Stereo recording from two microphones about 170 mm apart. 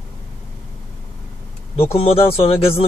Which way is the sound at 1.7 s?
35° left (ahead or behind).